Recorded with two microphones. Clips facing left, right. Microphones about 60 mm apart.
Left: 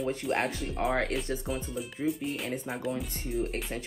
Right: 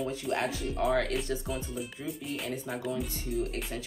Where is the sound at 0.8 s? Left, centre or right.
Left.